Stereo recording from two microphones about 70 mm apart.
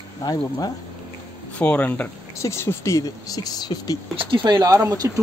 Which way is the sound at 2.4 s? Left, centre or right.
Left.